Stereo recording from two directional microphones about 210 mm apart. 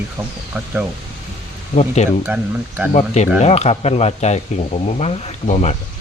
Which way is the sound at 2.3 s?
5° right (ahead or behind).